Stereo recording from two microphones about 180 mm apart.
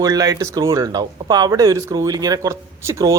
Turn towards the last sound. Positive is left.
turn(degrees=-15)  # may be behind; listen again after turning